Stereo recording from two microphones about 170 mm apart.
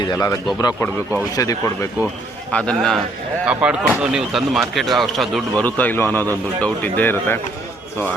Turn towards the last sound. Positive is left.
turn(degrees=10)  # may be behind; listen again after turning